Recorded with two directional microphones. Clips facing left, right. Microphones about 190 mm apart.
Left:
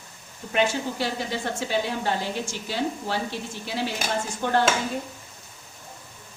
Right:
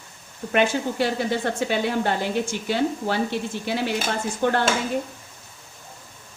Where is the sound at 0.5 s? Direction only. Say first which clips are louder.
Right 3 dB; 55° right (ahead or behind).